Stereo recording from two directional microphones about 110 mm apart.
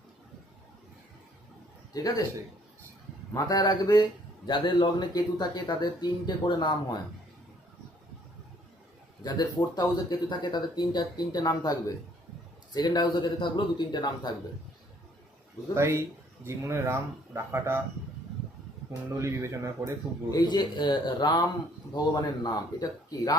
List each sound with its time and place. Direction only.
1.9 s a man's voice: 35° left (ahead or behind)
3.3 s speech: 35° left (ahead or behind)
9.2 s speech: 40° left (ahead or behind)
15.7 s speech: 25° right (ahead or behind)
19.2 s speech: 25° right (ahead or behind)
20.3 s speech: 40° left (ahead or behind)